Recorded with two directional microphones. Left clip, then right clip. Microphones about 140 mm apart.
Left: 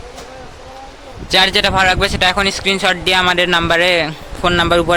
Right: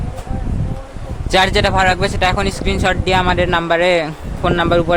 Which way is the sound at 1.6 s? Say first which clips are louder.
Left 1 dB; centre (ahead or behind).